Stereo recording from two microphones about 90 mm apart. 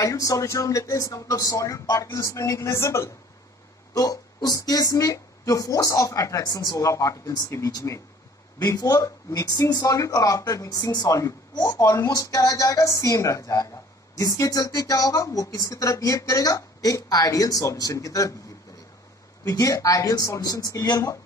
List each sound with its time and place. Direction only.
0.0 s speech: 40° left (ahead or behind)
3.9 s speech: 40° left (ahead or behind)
19.4 s speech: 40° left (ahead or behind)